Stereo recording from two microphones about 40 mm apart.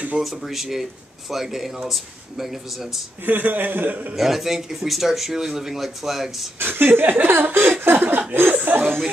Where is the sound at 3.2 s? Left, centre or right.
Right.